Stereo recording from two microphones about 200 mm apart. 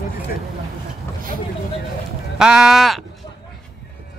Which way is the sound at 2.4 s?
5° right (ahead or behind).